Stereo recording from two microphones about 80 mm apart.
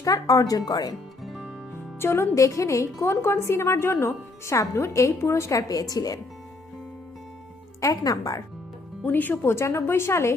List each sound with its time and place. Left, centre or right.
0.0 s speech: left
1.2 s music: centre
2.0 s speech: left
2.3 s a woman's voice: left
7.8 s speech: left
9.0 s a woman's voice: left